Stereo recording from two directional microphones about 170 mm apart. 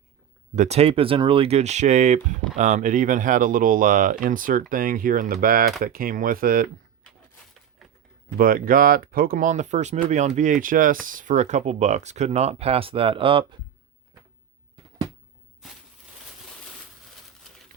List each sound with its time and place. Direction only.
0.5 s speech: 40° right (ahead or behind)
8.4 s speech: 55° right (ahead or behind); by 13.6 s 30° right (ahead or behind)